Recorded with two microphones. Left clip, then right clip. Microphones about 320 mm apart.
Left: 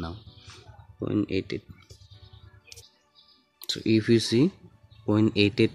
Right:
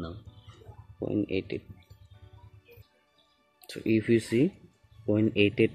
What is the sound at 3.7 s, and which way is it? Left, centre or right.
Speech, left.